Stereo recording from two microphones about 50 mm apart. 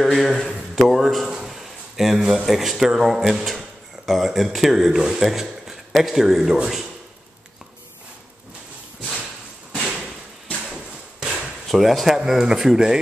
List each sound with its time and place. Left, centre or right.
0.0 s a man's voice: centre
9.8 s a sound: centre
10.7 s hammer: centre
11.6 s speech: centre
12.2 s speech: centre